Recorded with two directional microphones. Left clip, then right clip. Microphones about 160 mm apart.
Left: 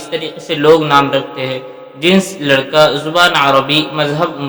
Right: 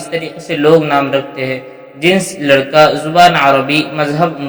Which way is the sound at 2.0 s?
Centre (ahead or behind).